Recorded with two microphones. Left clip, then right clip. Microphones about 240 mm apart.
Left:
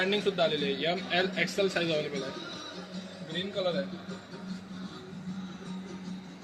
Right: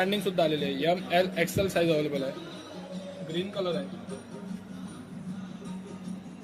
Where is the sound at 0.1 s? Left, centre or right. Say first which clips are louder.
Right 1 dB; right.